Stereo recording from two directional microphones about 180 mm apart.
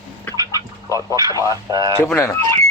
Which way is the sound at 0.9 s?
20° right (ahead or behind).